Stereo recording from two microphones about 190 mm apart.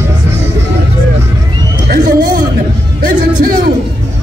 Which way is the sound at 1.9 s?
45° right (ahead or behind).